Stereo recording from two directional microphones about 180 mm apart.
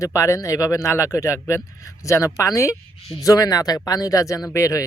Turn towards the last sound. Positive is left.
turn(degrees=15)  # may be behind; listen again after turning